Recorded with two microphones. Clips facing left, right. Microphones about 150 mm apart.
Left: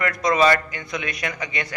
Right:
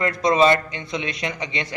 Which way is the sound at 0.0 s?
25° right (ahead or behind).